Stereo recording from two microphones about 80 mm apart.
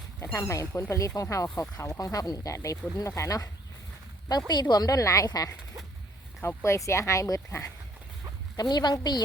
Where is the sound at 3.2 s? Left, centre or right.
Left.